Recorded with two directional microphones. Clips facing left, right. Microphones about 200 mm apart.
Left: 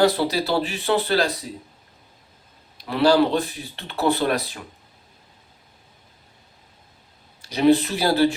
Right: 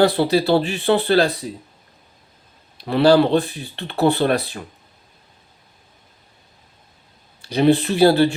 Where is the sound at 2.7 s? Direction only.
30° right (ahead or behind).